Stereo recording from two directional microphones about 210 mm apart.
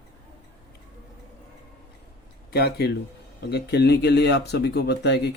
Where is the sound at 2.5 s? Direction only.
50° left (ahead or behind).